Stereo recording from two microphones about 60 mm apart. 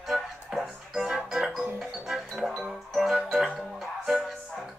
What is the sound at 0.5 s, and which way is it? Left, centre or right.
Music, centre.